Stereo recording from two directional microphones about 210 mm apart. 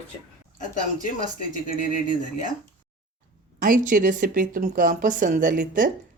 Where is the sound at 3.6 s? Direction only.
40° right (ahead or behind).